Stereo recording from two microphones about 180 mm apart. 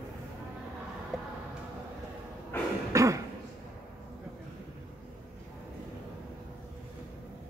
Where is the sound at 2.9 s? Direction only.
20° right (ahead or behind).